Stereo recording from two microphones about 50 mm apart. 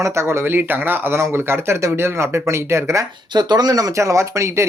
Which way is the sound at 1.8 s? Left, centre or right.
Right.